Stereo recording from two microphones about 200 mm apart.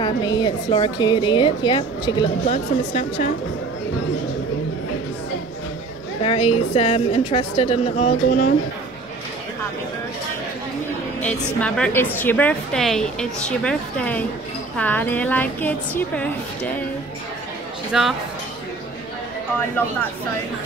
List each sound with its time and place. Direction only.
0.0 s a woman's voice: 20° left (ahead or behind)
2.4 s a woman's voice: 35° left (ahead or behind)
6.2 s a woman's voice: 30° left (ahead or behind)
11.6 s a woman's voice: 5° left (ahead or behind)
17.9 s speech: centre (ahead or behind)